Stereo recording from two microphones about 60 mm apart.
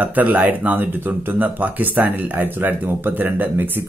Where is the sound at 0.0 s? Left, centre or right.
Right.